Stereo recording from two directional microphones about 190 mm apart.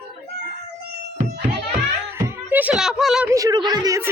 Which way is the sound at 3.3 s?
15° right (ahead or behind).